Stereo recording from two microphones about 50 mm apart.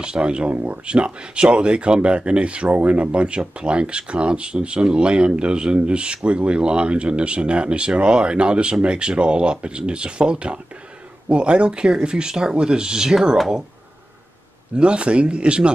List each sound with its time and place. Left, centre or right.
0.0 s speech: centre
14.8 s speech: right